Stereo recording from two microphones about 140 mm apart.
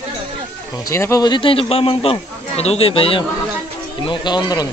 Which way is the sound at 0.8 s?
20° left (ahead or behind).